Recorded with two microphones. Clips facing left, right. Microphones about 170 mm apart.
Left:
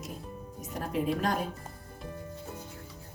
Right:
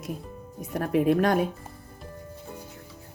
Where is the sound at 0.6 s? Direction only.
60° right (ahead or behind).